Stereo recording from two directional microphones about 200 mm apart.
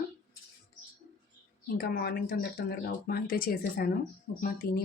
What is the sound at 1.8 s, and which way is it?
Speech, 50° left (ahead or behind).